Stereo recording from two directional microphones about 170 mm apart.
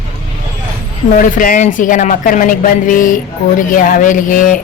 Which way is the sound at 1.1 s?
50° left (ahead or behind).